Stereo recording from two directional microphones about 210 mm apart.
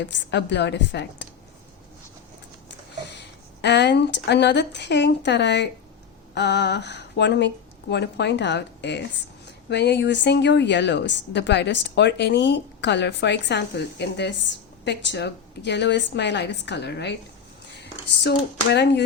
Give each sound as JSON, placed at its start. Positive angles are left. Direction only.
{"t": 0.0, "sound": "a woman's voice", "side_deg": 55}
{"t": 2.6, "sound": "a woman's voice", "side_deg": 55}
{"t": 18.2, "sound": "a woman's voice", "side_deg": 55}